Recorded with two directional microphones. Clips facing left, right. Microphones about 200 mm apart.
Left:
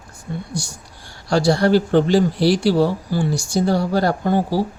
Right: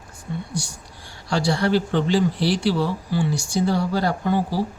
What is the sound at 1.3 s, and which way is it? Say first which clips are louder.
Speech: left 5 dB; 40° left (ahead or behind).